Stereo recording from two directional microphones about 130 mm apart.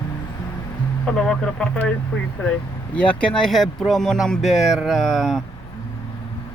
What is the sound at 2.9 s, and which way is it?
Speech, 10° left (ahead or behind).